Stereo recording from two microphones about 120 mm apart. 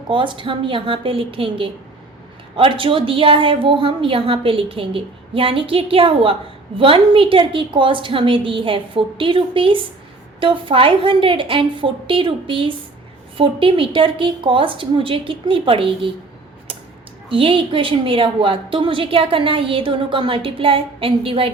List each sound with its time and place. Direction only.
0.1 s a woman's voice: 45° right (ahead or behind)
17.2 s a woman's voice: 50° right (ahead or behind)